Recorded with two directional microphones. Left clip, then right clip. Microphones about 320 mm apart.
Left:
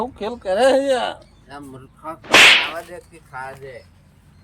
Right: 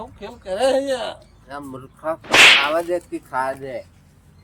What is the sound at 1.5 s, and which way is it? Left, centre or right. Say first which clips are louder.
Whip: right 4 dB; centre.